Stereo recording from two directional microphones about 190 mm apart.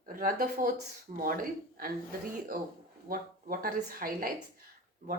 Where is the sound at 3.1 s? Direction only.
50° right (ahead or behind).